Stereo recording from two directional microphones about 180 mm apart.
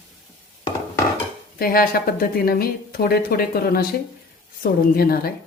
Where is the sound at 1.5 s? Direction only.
55° left (ahead or behind).